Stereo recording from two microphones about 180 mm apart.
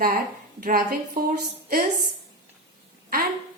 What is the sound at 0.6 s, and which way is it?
Speech, 55° right (ahead or behind).